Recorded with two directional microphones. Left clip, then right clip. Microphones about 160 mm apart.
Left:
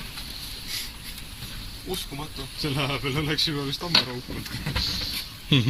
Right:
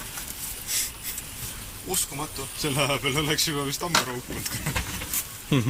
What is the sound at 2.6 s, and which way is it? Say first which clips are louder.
Speech: right 3 dB; 20° right (ahead or behind).